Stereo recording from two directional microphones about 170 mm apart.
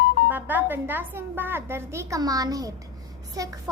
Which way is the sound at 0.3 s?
10° right (ahead or behind).